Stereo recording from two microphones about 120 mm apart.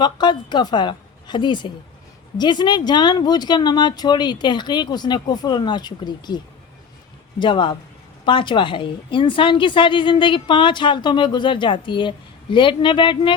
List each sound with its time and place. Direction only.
0.0 s a woman's voice: 40° left (ahead or behind)